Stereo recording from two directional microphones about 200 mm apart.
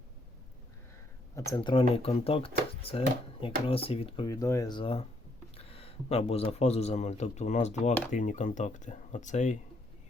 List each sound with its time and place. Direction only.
1.4 s a man's voice: 15° left (ahead or behind); by 9.6 s 35° left (ahead or behind)